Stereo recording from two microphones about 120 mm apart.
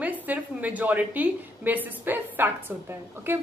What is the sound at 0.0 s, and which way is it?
A woman's voice, 15° right (ahead or behind).